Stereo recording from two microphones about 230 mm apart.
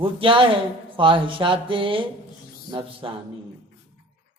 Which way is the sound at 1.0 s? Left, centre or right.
Right.